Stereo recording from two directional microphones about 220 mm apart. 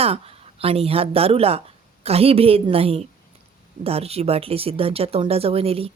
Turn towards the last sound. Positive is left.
turn(degrees=-25)  # may be behind; listen again after turning